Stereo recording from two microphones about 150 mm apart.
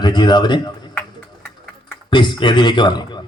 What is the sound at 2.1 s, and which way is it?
Speech, 30° left (ahead or behind).